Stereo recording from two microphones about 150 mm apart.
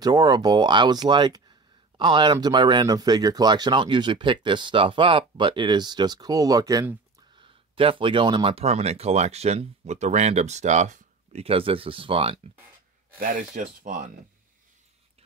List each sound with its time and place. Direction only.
0.0 s speech: 25° right (ahead or behind)
7.3 s speech: 35° right (ahead or behind)
13.2 s speech: 65° right (ahead or behind)